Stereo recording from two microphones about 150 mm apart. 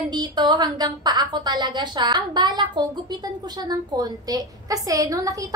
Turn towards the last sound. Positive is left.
turn(degrees=-20)  # may be behind; listen again after turning